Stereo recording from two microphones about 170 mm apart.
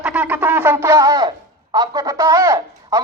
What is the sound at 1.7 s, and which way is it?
A man's voice, 20° right (ahead or behind).